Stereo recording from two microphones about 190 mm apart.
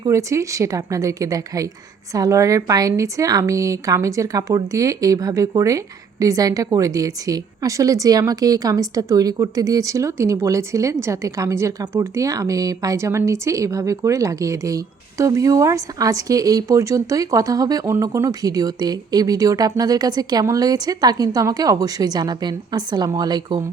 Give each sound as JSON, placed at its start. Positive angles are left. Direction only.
{"t": 0.0, "sound": "a woman's voice", "side_deg": -15}